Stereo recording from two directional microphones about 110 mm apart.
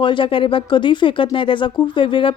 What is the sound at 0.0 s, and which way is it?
Speech, 50° left (ahead or behind).